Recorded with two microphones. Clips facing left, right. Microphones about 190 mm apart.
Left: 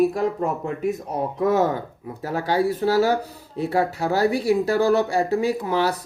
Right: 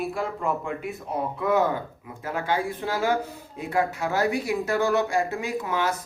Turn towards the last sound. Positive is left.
turn(degrees=35)  # may be behind; listen again after turning